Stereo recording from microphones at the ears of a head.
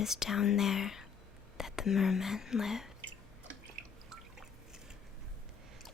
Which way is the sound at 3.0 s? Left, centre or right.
Right.